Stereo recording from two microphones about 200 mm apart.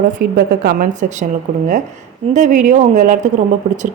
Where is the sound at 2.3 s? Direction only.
35° right (ahead or behind).